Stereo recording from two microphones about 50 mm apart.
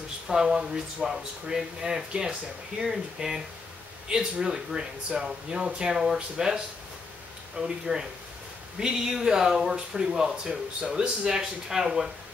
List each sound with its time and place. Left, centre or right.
0.3 s speech: centre